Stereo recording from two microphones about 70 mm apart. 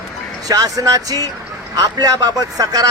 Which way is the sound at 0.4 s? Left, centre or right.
Right.